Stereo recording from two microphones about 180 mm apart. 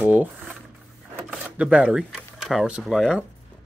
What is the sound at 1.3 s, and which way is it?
Speech, 5° right (ahead or behind).